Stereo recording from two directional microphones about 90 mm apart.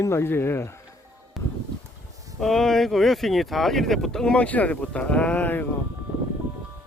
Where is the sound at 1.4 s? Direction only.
Centre (ahead or behind).